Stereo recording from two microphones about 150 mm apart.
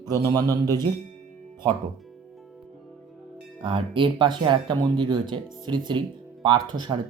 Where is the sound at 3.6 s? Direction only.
35° right (ahead or behind).